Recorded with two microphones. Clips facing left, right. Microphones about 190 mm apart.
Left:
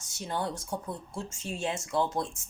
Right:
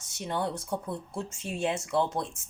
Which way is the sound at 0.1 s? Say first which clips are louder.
Right 2 dB; 60° right (ahead or behind).